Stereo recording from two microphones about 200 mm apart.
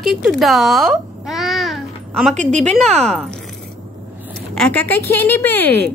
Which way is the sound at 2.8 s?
5° left (ahead or behind).